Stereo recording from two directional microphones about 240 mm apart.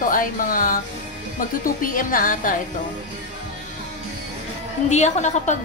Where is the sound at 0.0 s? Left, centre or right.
Left.